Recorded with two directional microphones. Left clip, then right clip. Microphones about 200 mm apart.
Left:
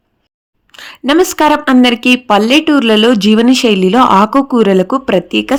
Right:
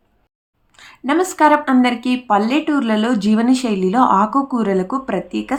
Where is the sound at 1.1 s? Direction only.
45° left (ahead or behind).